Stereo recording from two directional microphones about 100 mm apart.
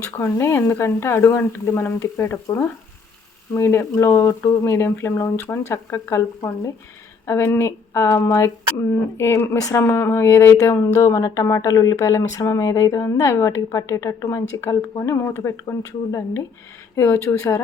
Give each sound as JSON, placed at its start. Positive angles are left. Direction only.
{"t": 0.0, "sound": "speech", "side_deg": 20}
{"t": 16.9, "sound": "speech", "side_deg": 30}